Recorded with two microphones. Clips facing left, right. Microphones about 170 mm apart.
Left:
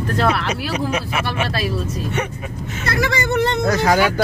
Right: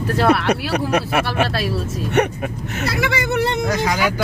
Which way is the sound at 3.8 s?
55° left (ahead or behind).